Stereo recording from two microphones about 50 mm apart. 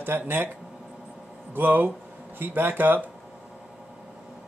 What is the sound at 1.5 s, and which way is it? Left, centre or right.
Speech, right.